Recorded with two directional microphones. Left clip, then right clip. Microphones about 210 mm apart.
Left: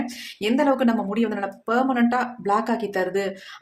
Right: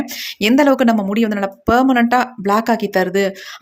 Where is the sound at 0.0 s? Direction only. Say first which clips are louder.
Right 8 dB; 40° right (ahead or behind).